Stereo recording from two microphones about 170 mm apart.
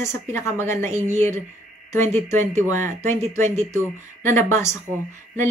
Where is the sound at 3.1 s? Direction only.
45° right (ahead or behind).